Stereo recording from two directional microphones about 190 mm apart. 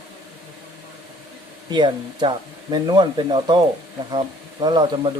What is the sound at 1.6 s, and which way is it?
Speech, 25° right (ahead or behind).